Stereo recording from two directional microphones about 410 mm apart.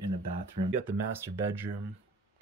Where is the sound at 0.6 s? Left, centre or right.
Centre.